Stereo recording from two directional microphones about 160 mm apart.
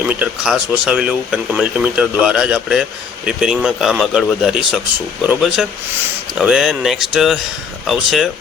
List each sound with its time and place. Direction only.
0.1 s speech: 5° right (ahead or behind)